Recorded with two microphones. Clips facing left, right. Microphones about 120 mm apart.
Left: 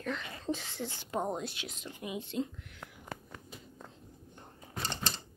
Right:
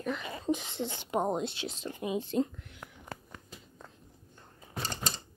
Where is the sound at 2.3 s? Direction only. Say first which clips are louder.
Right 5 dB; 45° right (ahead or behind).